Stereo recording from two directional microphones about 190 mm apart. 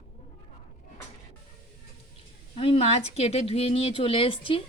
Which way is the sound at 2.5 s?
30° left (ahead or behind).